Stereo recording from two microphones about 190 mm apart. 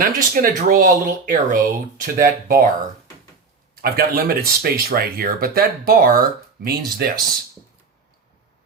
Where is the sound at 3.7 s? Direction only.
50° right (ahead or behind).